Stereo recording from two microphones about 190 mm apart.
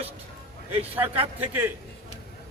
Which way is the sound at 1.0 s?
30° right (ahead or behind).